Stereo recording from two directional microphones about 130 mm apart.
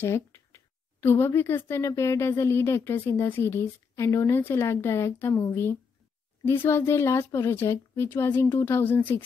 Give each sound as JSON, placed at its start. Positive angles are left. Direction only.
{"t": 0.0, "sound": "a woman's voice", "side_deg": 20}